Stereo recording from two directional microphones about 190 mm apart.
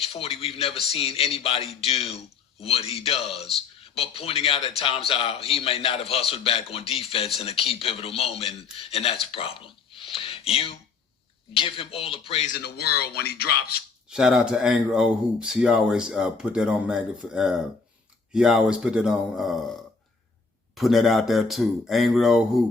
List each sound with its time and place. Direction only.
0.0 s a man's voice: 30° left (ahead or behind)
12.6 s speech: 55° left (ahead or behind)
14.1 s speech: 5° right (ahead or behind)
20.7 s speech: centre (ahead or behind)